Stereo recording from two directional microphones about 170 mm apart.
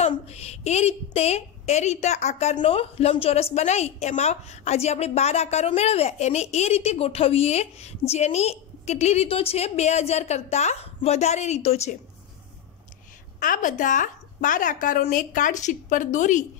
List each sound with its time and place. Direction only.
0.0 s a woman's voice: 40° left (ahead or behind)
13.4 s a woman's voice: 50° left (ahead or behind)